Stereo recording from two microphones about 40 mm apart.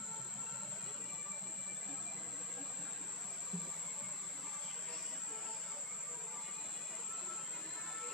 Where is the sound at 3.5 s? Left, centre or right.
Centre.